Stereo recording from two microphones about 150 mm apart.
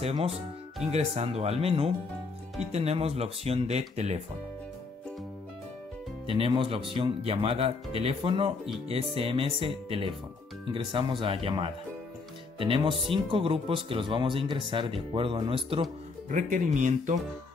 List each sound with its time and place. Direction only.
0.0 s speech: 40° right (ahead or behind)
6.2 s speech: 40° right (ahead or behind)
16.3 s speech: 60° right (ahead or behind)